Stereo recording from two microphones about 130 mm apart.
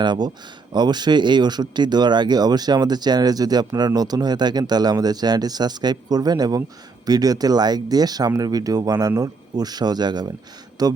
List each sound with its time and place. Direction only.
0.0 s speech: 35° right (ahead or behind)